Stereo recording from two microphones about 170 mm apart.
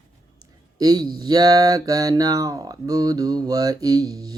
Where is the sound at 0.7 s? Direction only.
25° right (ahead or behind).